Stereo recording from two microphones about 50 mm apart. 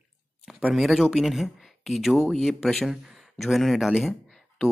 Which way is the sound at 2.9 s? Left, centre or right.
Centre.